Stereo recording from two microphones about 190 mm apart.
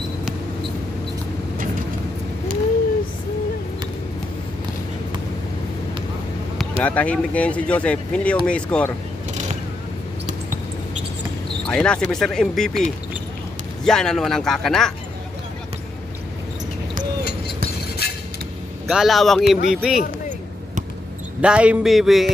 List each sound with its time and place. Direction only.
6.8 s speech: 5° left (ahead or behind)
11.6 s speech: 5° left (ahead or behind)
13.8 s speech: 5° left (ahead or behind)
18.0 s creak: 55° left (ahead or behind)
18.9 s speech: centre (ahead or behind)
21.4 s speech: 5° right (ahead or behind)